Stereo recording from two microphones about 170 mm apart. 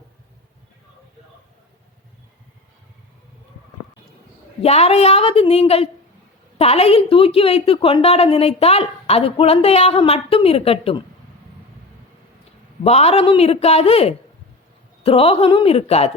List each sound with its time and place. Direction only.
4.6 s a woman's voice: 40° left (ahead or behind)
12.8 s a woman's voice: 40° left (ahead or behind)